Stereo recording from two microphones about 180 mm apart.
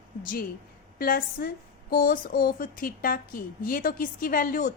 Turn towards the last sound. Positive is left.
turn(degrees=50)  # may be behind; listen again after turning